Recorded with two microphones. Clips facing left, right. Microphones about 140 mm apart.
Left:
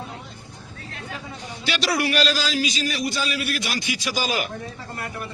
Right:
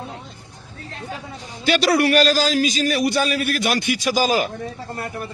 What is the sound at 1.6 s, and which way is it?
A man's voice, 50° right (ahead or behind).